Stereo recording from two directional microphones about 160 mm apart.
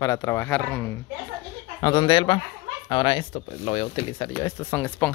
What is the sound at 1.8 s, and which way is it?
Speech, 30° left (ahead or behind).